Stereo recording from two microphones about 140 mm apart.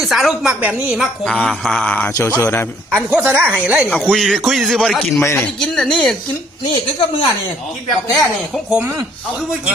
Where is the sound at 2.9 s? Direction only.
15° right (ahead or behind); by 5.2 s centre (ahead or behind).